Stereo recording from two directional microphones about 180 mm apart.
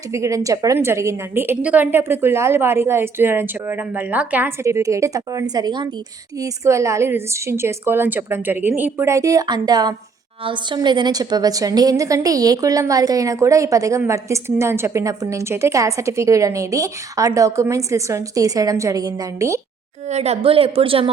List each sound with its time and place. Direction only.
0.1 s a woman's voice: 15° right (ahead or behind)
20.1 s a woman's voice: 35° right (ahead or behind)